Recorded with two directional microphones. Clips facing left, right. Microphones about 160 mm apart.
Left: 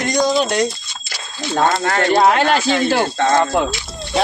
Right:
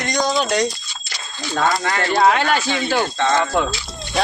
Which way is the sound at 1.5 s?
30° left (ahead or behind).